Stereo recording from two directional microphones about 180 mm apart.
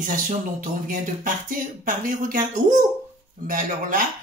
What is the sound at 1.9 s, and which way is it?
Speech, 45° right (ahead or behind).